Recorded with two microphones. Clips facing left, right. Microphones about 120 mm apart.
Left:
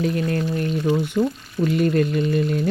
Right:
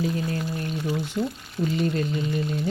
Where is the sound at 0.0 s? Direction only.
65° left (ahead or behind).